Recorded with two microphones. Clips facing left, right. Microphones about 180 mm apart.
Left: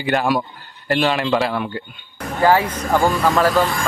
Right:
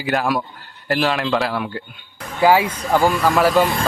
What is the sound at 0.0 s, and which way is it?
Speech, centre (ahead or behind).